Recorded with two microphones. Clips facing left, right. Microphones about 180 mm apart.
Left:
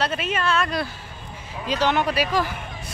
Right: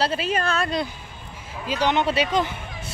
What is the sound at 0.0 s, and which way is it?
Speech, 30° right (ahead or behind).